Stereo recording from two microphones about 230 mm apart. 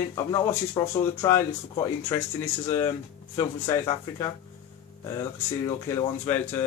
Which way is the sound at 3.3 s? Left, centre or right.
Centre.